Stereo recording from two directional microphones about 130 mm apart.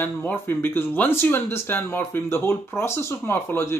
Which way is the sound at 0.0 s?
15° left (ahead or behind).